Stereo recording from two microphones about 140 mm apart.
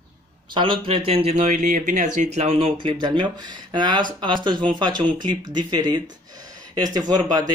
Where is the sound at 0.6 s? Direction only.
35° right (ahead or behind).